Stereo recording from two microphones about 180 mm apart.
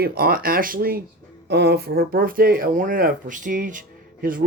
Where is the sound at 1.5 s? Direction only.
70° right (ahead or behind).